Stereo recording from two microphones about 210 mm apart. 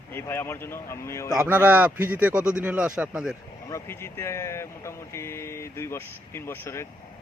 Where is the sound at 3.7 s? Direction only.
10° left (ahead or behind).